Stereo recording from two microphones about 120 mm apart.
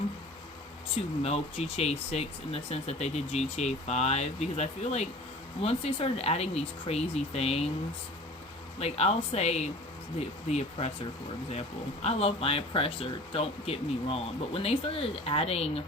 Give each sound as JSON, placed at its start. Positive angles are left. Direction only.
{"t": 0.9, "sound": "speech", "side_deg": 55}
{"t": 8.8, "sound": "speech", "side_deg": 60}
{"t": 12.0, "sound": "speech", "side_deg": 55}